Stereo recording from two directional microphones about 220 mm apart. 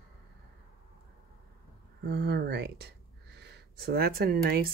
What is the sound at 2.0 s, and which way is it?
Speech, 50° right (ahead or behind).